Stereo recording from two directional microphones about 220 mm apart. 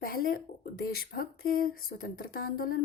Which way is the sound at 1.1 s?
40° left (ahead or behind).